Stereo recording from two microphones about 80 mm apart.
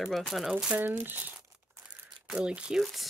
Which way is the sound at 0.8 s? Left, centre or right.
Right.